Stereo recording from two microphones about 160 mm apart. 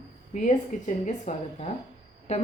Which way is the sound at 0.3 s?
50° left (ahead or behind).